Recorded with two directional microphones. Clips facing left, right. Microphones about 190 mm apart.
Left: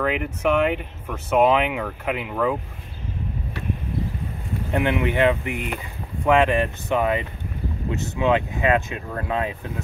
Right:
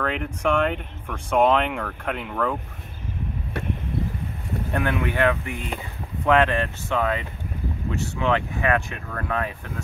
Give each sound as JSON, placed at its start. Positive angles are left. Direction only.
{"t": 0.0, "sound": "speech", "side_deg": 5}
{"t": 4.7, "sound": "speech", "side_deg": 20}